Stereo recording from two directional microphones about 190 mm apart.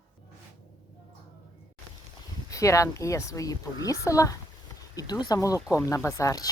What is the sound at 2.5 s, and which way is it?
Speech, 15° left (ahead or behind).